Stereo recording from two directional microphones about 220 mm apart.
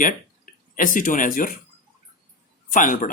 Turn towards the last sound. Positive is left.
turn(degrees=35)  # may be behind; listen again after turning